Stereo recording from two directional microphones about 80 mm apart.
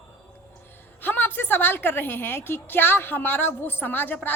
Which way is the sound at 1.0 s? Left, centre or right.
Left.